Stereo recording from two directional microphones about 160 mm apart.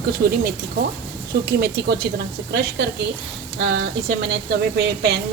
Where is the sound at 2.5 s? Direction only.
90° right.